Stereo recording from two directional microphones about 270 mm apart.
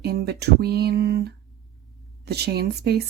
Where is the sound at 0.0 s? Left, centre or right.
Right.